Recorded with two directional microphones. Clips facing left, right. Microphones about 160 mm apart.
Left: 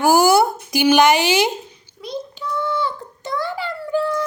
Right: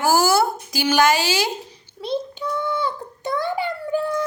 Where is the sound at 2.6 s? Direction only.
20° right (ahead or behind).